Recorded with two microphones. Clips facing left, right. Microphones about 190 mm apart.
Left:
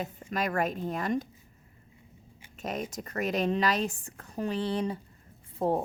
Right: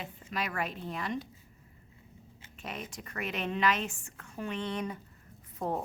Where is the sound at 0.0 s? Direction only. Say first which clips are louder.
Left 5 dB; 45° left (ahead or behind).